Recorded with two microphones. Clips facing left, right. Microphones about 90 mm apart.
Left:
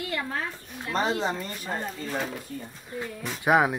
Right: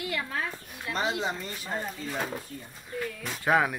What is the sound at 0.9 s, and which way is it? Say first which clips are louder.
Speech: left 3 dB; 40° left (ahead or behind).